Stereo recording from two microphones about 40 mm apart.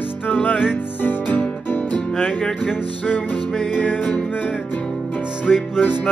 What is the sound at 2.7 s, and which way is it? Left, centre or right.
Music, left.